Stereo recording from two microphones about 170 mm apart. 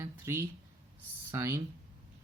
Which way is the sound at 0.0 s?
15° right (ahead or behind).